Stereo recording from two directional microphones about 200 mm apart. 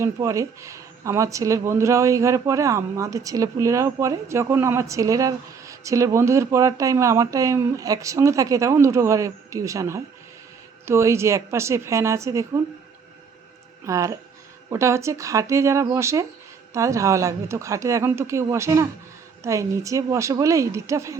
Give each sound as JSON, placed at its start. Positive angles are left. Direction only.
{"t": 0.0, "sound": "speech", "side_deg": -15}
{"t": 13.8, "sound": "speech", "side_deg": -15}